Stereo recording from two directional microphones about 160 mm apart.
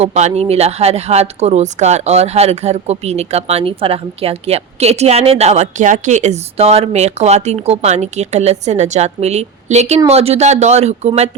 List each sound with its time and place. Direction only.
0.0 s speech: 45° right (ahead or behind)